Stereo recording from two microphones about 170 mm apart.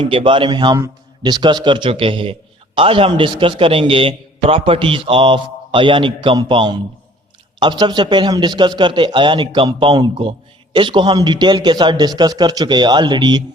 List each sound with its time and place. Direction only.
0.0 s a man's voice: 30° right (ahead or behind)